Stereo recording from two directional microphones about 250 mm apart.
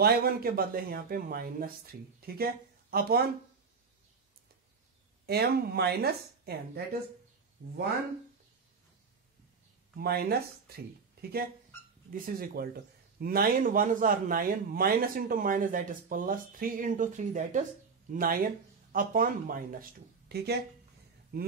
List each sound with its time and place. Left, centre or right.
0.0 s speech: right
5.2 s speech: right
9.9 s speech: right